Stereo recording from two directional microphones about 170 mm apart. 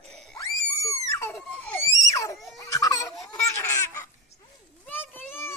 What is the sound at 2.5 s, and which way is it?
Laughter, 20° left (ahead or behind).